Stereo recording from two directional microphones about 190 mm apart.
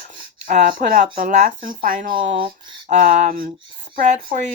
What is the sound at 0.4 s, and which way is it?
Speech, 45° right (ahead or behind).